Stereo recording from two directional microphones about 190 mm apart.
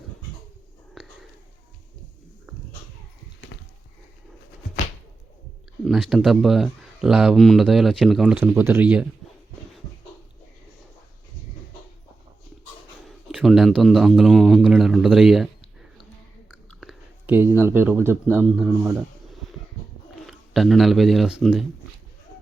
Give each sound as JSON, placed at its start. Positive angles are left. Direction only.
{"t": 3.5, "sound": "a sound", "side_deg": 65}
{"t": 5.8, "sound": "speech", "side_deg": 0}
{"t": 13.1, "sound": "a man's voice", "side_deg": 0}
{"t": 16.8, "sound": "a sound", "side_deg": -10}
{"t": 17.6, "sound": "speech", "side_deg": -10}
{"t": 20.2, "sound": "speech", "side_deg": 0}